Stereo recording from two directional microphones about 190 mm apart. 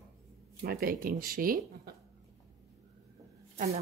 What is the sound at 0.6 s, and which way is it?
Speech, 50° right (ahead or behind).